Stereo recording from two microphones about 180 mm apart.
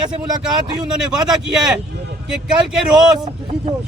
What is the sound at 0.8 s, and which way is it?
Speech, 5° right (ahead or behind).